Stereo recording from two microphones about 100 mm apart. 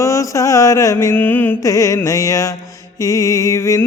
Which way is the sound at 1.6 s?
35° left (ahead or behind).